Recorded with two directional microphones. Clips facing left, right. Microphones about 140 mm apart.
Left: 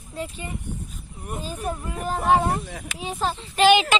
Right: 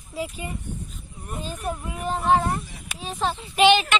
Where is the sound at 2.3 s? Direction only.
15° left (ahead or behind).